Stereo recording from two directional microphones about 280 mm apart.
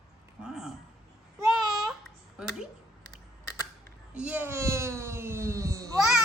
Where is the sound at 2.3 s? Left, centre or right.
Centre.